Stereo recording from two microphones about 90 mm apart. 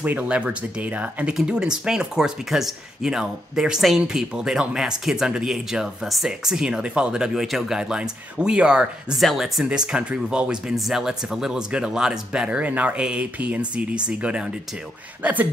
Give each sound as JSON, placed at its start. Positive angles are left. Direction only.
{"t": 0.0, "sound": "speech", "side_deg": -20}